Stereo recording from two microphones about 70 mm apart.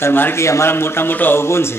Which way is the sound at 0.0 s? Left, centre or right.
Left.